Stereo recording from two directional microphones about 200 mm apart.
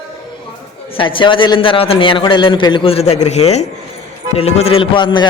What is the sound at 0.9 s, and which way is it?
A man's voice, 25° left (ahead or behind).